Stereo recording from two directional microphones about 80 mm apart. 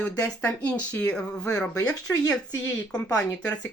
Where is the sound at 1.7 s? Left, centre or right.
Left.